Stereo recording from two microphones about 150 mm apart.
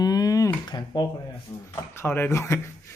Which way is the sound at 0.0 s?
25° left (ahead or behind).